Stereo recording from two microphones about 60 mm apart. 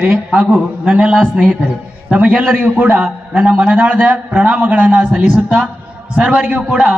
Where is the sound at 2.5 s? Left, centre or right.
Right.